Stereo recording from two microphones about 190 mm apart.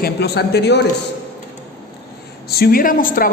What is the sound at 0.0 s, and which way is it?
Speech, 60° left (ahead or behind).